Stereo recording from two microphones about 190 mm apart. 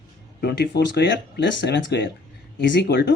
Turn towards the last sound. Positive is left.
turn(degrees=65)  # may be behind; listen again after turning